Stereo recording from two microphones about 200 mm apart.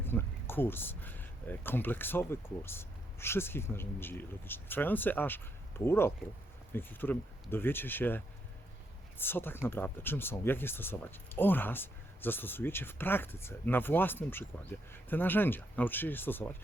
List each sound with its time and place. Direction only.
0.0 s speech: 10° left (ahead or behind)